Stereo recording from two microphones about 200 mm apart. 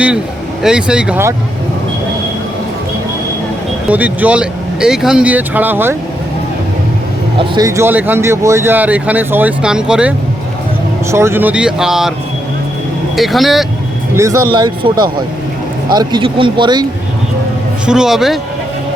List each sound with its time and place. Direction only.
0.6 s speech: 5° right (ahead or behind)
3.8 s speech: 5° right (ahead or behind)
7.3 s speech: 20° right (ahead or behind); by 12.1 s centre (ahead or behind)
13.1 s speech: centre (ahead or behind)
14.2 s speech: 15° right (ahead or behind)
17.8 s speech: 5° right (ahead or behind)